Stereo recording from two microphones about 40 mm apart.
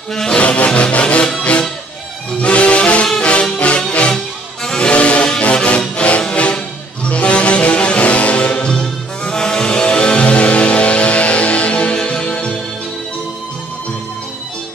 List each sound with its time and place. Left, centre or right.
0.1 s music: centre
0.4 s music: left
8.6 s music: left